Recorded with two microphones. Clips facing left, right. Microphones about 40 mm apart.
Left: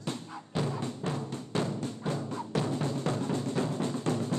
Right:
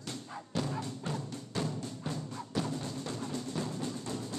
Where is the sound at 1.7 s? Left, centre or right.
Left.